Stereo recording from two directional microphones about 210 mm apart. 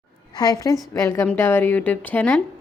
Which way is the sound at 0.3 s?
15° left (ahead or behind).